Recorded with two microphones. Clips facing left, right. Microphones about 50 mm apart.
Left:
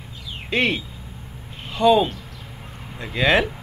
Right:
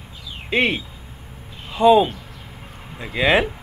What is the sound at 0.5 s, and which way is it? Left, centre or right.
Speech, centre.